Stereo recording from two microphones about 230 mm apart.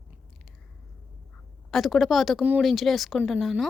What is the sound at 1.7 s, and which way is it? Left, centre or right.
Speech, centre.